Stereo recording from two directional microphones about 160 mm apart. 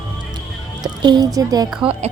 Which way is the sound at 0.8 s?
25° right (ahead or behind).